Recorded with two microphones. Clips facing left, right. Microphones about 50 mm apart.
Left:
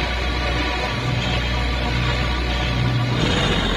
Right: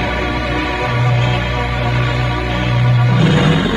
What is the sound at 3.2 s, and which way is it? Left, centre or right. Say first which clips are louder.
Music: right 7 dB; right.